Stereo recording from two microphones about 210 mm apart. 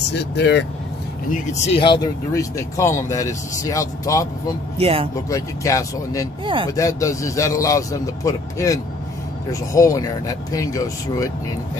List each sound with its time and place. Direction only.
0.1 s speech: 55° left (ahead or behind)
1.3 s speech: 35° left (ahead or behind); by 4.3 s 15° left (ahead or behind)
4.7 s speech: 30° right (ahead or behind)
5.3 s speech: 15° left (ahead or behind)
6.4 s speech: 25° right (ahead or behind)
6.7 s speech: 15° left (ahead or behind)